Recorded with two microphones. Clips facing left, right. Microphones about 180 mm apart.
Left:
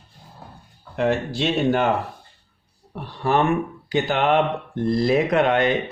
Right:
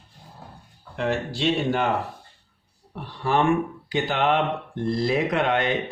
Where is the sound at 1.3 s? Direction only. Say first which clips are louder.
Left 3 dB; 55° left (ahead or behind).